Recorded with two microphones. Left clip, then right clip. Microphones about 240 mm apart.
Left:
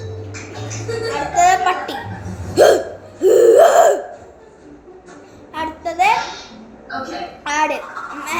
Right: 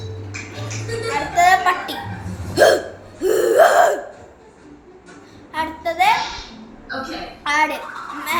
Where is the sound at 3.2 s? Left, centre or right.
Centre.